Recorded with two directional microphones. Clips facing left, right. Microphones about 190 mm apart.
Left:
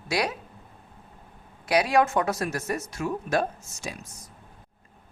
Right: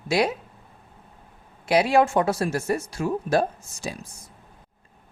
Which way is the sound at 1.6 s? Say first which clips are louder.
Right 3 dB; 25° right (ahead or behind).